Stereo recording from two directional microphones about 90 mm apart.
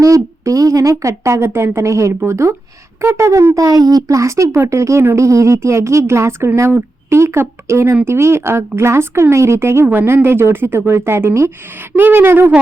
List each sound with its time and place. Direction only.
0.0 s a woman's voice: 35° right (ahead or behind)